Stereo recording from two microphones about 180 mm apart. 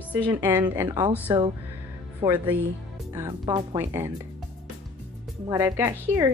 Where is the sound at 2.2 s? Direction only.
20° right (ahead or behind).